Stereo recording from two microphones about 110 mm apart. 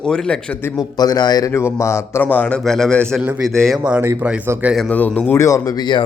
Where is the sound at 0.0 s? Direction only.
5° left (ahead or behind).